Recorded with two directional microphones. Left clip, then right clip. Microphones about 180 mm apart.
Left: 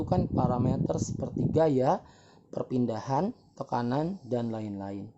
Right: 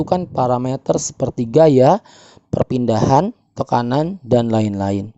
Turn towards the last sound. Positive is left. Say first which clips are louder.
# right 18 dB
turn(degrees=-60)  # may be behind; listen again after turning